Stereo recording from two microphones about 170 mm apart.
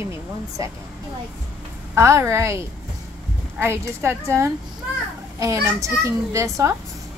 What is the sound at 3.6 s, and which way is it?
A child's voice, 15° right (ahead or behind).